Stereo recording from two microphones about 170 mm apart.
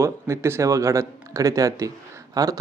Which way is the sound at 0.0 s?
15° right (ahead or behind).